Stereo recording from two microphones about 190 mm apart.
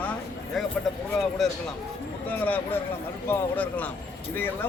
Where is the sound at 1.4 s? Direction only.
Centre (ahead or behind).